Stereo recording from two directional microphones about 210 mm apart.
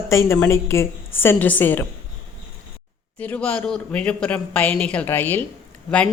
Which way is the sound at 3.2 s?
5° left (ahead or behind).